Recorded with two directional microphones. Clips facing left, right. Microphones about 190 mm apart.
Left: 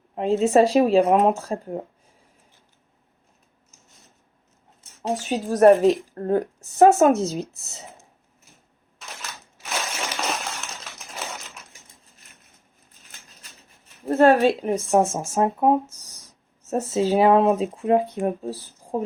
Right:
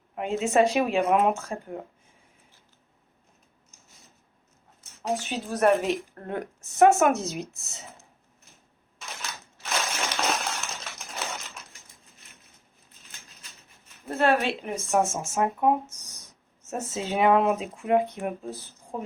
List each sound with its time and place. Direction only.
0.2 s a woman's voice: 35° left (ahead or behind)
5.0 s a woman's voice: 40° left (ahead or behind)
10.2 s a sound: centre (ahead or behind)
11.1 s typewriter: 5° left (ahead or behind)
14.0 s a woman's voice: 40° left (ahead or behind)